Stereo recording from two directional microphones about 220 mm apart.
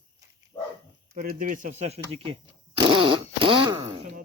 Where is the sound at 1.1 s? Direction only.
40° right (ahead or behind).